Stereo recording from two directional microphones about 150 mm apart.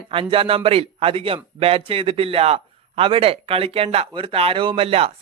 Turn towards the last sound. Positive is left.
turn(degrees=-40)  # may be behind; listen again after turning